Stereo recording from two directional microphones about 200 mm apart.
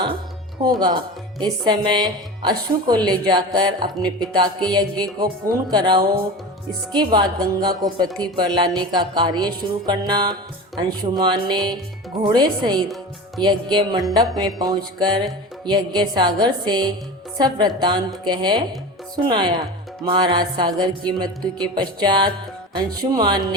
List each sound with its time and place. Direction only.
0.6 s music: 20° right (ahead or behind)